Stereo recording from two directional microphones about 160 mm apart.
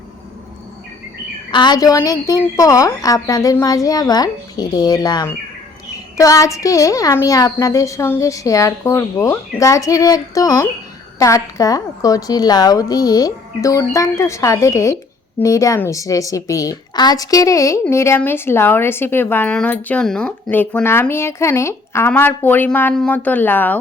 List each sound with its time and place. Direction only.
1.5 s a woman's voice: 30° left (ahead or behind); by 23.7 s 10° left (ahead or behind)